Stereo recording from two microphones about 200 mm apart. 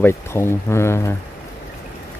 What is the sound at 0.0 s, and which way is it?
Speech, 10° left (ahead or behind).